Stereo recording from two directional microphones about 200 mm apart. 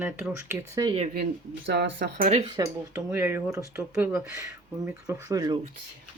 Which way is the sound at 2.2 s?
35° right (ahead or behind).